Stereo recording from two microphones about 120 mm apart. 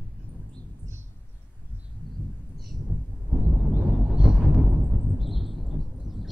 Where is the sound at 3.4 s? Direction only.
15° right (ahead or behind).